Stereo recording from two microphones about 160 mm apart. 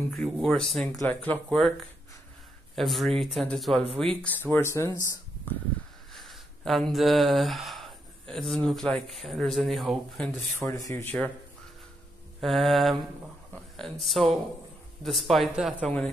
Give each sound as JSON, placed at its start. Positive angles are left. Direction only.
{"t": 0.1, "sound": "speech", "side_deg": 0}
{"t": 2.7, "sound": "speech", "side_deg": 0}
{"t": 4.2, "sound": "speech", "side_deg": 10}
{"t": 6.1, "sound": "speech", "side_deg": 0}
{"t": 10.7, "sound": "speech", "side_deg": 20}
{"t": 12.4, "sound": "speech", "side_deg": 0}
{"t": 13.9, "sound": "speech", "side_deg": 0}
{"t": 15.8, "sound": "speech", "side_deg": 10}